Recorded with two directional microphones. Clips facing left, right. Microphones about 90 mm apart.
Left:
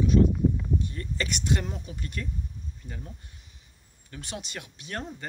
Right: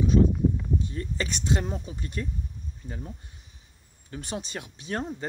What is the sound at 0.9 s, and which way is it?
Speech, 20° right (ahead or behind).